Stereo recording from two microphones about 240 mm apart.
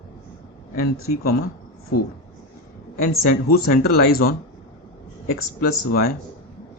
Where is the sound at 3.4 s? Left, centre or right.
Left.